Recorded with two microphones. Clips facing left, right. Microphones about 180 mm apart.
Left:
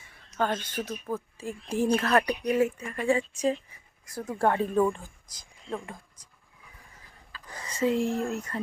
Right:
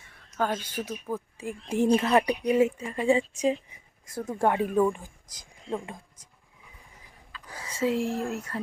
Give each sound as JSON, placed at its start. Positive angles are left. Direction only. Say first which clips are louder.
{"t": 0.1, "sound": "a woman's voice", "louder": "even", "side_deg": -5}
{"t": 7.4, "sound": "speech", "louder": "left 1 dB", "side_deg": -5}